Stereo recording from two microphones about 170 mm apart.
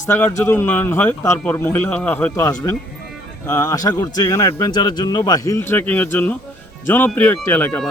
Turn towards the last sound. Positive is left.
turn(degrees=10)  # may be behind; listen again after turning